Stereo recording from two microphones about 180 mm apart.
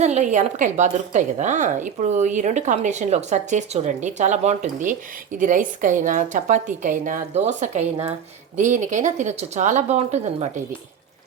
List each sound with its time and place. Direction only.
0.0 s a woman's voice: 40° right (ahead or behind)